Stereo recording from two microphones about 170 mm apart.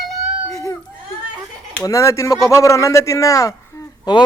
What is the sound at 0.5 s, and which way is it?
Speech, 20° left (ahead or behind).